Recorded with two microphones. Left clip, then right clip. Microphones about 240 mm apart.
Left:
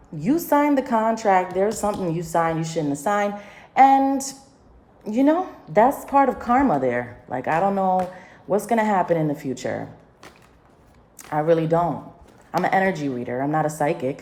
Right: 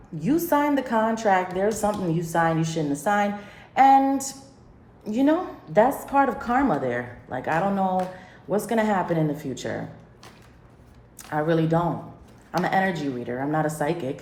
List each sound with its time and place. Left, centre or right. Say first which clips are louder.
0.3 s a woman's voice: left 3 dB; left
11.2 s a woman's voice: left 4 dB; left